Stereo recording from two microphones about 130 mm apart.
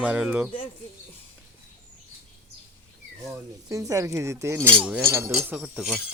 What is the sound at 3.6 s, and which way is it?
Speech, 25° right (ahead or behind).